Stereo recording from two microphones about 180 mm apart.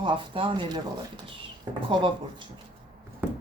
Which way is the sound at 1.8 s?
25° right (ahead or behind).